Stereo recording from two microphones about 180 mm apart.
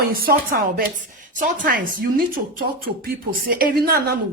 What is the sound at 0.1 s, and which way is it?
A man's voice, 55° right (ahead or behind).